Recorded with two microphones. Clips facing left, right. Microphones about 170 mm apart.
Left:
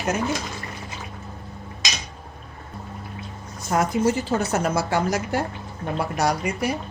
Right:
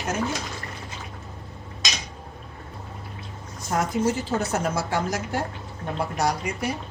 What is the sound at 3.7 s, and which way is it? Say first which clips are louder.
Speech: left 3 dB; 90° left.